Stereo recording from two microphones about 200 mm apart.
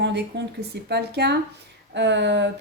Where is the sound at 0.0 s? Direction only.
60° right (ahead or behind).